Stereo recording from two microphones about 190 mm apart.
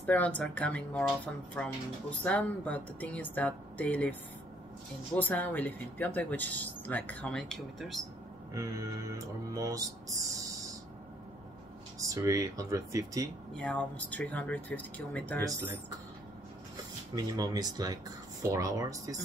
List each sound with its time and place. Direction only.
0.0 s speech: 10° left (ahead or behind)
9.5 s speech: 20° right (ahead or behind)
12.0 s speech: 15° right (ahead or behind)
13.6 s speech: 5° left (ahead or behind)
15.4 s speech: 10° right (ahead or behind)
17.1 s speech: 20° right (ahead or behind)